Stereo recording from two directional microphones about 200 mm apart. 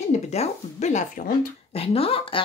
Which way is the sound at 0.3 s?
35° left (ahead or behind).